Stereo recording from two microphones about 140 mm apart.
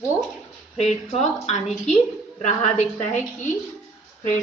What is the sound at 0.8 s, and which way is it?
A woman's voice, 55° left (ahead or behind).